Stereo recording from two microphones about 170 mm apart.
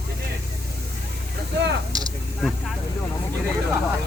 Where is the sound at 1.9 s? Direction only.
25° right (ahead or behind).